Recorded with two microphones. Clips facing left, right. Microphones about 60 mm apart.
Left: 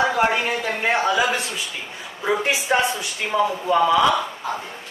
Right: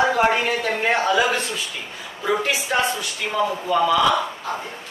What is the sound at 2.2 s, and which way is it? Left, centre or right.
Speech, left.